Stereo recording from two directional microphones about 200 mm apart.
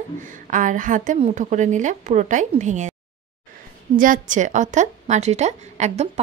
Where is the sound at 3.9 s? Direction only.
40° right (ahead or behind).